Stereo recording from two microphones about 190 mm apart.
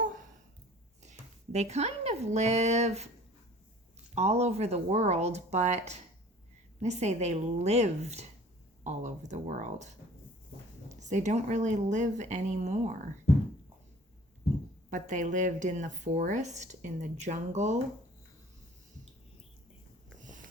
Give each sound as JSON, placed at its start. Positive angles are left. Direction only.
{"t": 1.5, "sound": "speech", "side_deg": -35}
{"t": 4.1, "sound": "speech", "side_deg": -35}
{"t": 14.8, "sound": "speech", "side_deg": -40}